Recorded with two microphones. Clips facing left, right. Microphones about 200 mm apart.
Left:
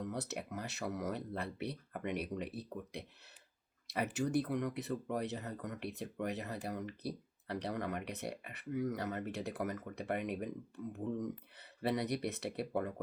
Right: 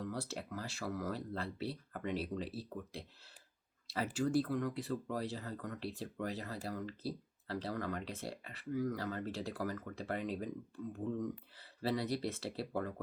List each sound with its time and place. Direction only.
0.0 s speech: 20° left (ahead or behind)
11.8 s speech: 20° left (ahead or behind)